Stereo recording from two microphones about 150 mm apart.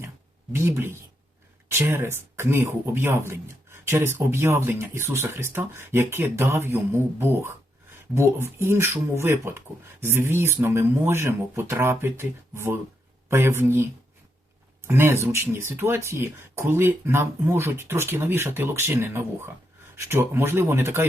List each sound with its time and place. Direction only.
0.5 s speech: 15° right (ahead or behind)
14.8 s speech: 15° right (ahead or behind)